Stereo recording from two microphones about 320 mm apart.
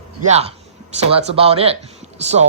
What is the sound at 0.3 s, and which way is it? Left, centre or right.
Speech, centre.